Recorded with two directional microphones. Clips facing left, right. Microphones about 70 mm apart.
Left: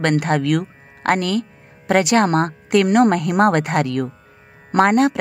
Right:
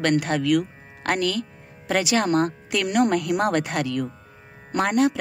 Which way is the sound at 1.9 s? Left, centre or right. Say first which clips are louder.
Left 6 dB; left.